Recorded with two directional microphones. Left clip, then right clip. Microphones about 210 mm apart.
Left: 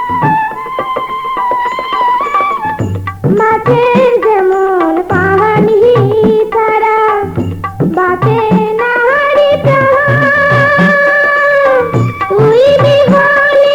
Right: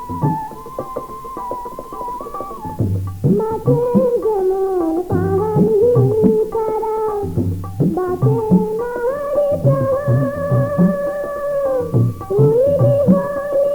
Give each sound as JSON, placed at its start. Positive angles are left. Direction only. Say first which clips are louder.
{"t": 2.0, "sound": "music", "louder": "left 16 dB", "side_deg": -30}